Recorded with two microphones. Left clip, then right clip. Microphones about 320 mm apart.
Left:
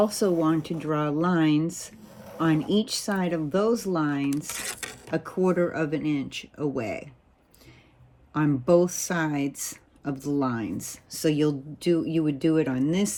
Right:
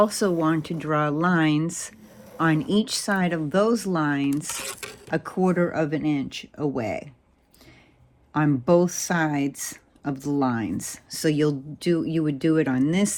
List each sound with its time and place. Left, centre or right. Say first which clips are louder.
0.0 s speech: right 2 dB; right
8.3 s speech: right 1 dB; right